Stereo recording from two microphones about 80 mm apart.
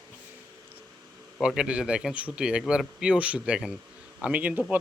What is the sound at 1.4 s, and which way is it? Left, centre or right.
Speech, centre.